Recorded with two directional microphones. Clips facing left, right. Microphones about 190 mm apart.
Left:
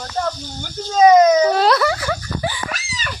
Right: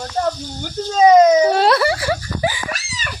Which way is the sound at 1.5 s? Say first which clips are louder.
Right 1 dB; centre (ahead or behind).